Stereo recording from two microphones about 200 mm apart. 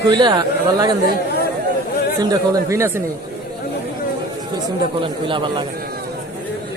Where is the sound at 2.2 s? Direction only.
20° right (ahead or behind).